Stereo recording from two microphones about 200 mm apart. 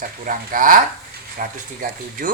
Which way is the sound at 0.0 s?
40° right (ahead or behind).